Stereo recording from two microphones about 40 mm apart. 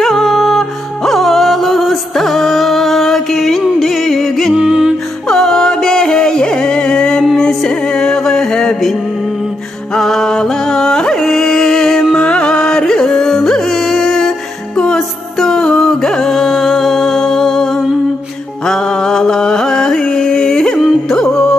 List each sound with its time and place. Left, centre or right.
0.0 s music: centre
4.6 s music: centre
5.3 s music: centre
9.9 s music: centre
12.1 s music: left
18.7 s mantra: centre